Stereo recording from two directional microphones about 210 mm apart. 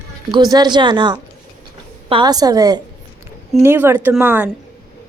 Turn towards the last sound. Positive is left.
turn(degrees=-10)  # may be behind; listen again after turning